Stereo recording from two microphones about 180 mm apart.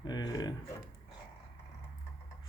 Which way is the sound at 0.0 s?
20° left (ahead or behind).